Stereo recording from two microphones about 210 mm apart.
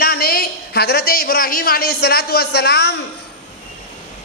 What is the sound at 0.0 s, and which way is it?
A woman's voice, 45° left (ahead or behind).